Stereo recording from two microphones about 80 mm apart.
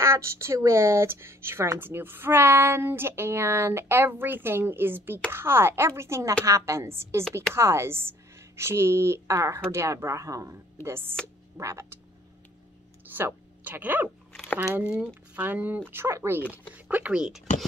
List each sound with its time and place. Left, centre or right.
0.0 s speech: right
13.1 s speech: right
15.9 s speech: right
16.9 s speech: centre